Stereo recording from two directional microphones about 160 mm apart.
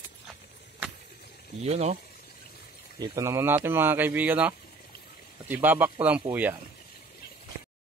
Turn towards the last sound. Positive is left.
turn(degrees=-10)  # may be behind; listen again after turning